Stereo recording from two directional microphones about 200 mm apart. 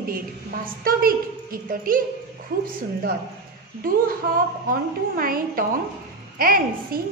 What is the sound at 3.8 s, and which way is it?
A woman's voice, 45° right (ahead or behind).